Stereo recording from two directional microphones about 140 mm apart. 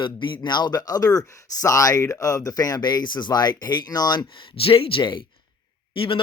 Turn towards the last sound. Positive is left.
turn(degrees=40)  # may be behind; listen again after turning